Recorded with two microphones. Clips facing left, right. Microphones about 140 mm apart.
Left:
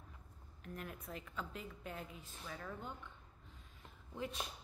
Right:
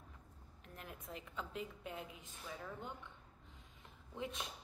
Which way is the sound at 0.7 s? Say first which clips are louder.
Left 2 dB; 20° right (ahead or behind).